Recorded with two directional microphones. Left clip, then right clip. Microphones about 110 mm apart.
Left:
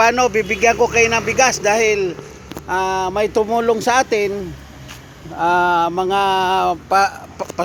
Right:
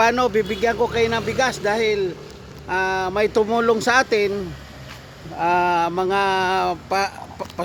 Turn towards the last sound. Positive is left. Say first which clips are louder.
# left 5 dB
turn(degrees=0)  # may be behind; listen again after turning